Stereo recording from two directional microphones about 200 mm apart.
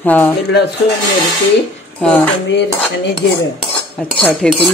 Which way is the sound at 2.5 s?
60° left (ahead or behind).